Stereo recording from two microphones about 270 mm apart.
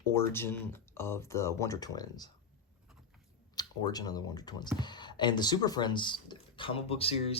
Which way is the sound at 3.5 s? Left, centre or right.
Centre.